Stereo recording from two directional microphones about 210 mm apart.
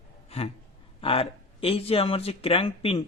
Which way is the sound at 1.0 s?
25° left (ahead or behind).